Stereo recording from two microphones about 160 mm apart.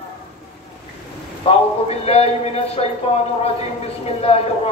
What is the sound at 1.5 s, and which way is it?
A man's voice, 40° left (ahead or behind).